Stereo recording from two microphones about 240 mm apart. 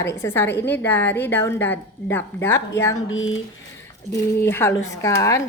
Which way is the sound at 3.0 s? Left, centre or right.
Left.